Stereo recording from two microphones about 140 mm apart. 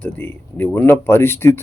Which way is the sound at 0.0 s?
15° left (ahead or behind).